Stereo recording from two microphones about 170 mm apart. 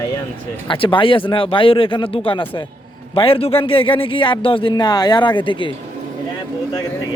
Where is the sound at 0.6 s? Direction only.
30° left (ahead or behind).